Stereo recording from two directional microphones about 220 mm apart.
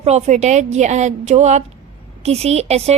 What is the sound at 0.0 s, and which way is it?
A woman's voice, 30° right (ahead or behind).